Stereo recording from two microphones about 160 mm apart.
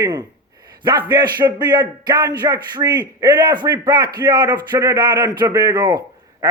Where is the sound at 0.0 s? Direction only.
25° right (ahead or behind).